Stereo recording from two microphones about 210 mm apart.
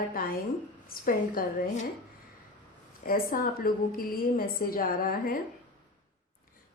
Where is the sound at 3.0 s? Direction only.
40° left (ahead or behind).